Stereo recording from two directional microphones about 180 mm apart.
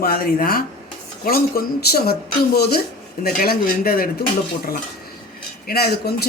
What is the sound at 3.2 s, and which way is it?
Speech, 55° left (ahead or behind).